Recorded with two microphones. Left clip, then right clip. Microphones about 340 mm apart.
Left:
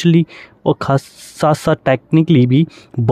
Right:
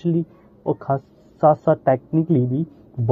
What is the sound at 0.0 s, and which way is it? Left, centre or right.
Speech, left.